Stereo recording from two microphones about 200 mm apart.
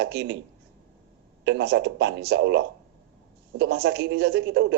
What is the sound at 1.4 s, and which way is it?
A man's voice, 60° right (ahead or behind).